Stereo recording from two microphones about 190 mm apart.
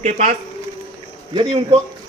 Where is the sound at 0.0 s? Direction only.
35° right (ahead or behind).